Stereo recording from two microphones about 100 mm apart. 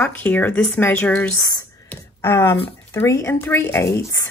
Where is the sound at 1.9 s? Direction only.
25° left (ahead or behind).